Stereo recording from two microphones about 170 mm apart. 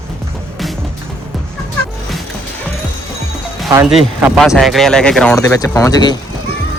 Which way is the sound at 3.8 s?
5° right (ahead or behind).